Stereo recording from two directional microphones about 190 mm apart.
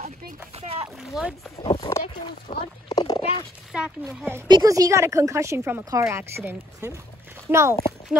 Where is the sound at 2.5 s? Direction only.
25° left (ahead or behind).